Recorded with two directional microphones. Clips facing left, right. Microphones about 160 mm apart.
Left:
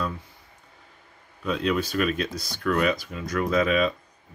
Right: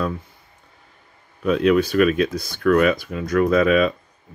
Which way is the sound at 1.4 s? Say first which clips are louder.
Right 8 dB; 60° right (ahead or behind).